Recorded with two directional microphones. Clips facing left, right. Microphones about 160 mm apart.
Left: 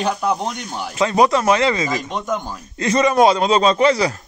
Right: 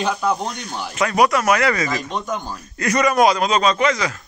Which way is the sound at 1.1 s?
25° left (ahead or behind).